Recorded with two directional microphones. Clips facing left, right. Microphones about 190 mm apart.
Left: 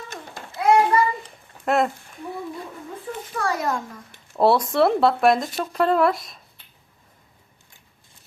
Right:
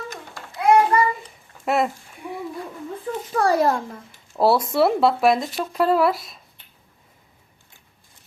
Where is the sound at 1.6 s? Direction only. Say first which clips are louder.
Left 1 dB; 5° right (ahead or behind).